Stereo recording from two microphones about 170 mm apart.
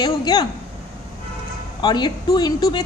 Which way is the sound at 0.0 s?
25° left (ahead or behind).